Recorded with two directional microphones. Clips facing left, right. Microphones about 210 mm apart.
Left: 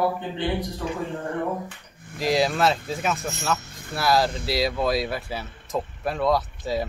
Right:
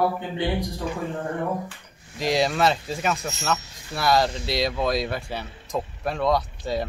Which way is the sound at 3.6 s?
55° left (ahead or behind).